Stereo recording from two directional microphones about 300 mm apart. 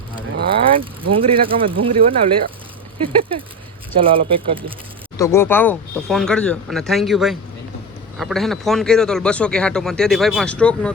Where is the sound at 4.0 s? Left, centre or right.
Centre.